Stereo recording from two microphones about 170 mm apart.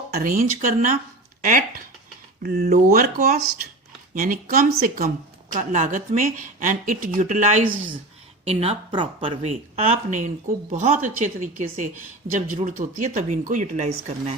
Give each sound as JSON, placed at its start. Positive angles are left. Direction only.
{"t": 0.1, "sound": "a woman's voice", "side_deg": -55}
{"t": 2.4, "sound": "speech", "side_deg": -65}
{"t": 2.6, "sound": "a woman's voice", "side_deg": -50}
{"t": 5.0, "sound": "a woman's voice", "side_deg": -45}
{"t": 8.4, "sound": "a woman's voice", "side_deg": -35}